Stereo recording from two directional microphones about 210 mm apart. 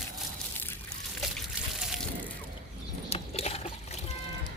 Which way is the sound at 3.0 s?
30° left (ahead or behind).